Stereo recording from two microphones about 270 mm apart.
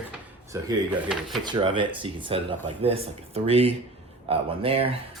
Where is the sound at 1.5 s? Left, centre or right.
Centre.